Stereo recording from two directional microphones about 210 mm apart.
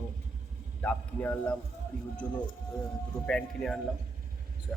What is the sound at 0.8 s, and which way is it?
Speech, 10° left (ahead or behind).